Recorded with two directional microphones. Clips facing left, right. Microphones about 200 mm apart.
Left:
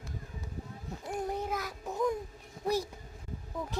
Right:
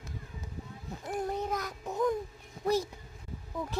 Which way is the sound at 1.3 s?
10° left (ahead or behind).